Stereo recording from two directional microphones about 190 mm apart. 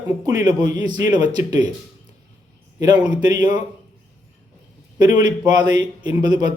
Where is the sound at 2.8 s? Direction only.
20° right (ahead or behind).